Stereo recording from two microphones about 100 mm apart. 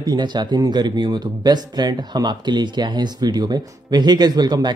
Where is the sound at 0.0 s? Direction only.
45° right (ahead or behind).